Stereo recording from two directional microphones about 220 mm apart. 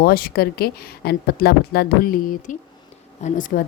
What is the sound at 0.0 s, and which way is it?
A woman's voice, 40° left (ahead or behind).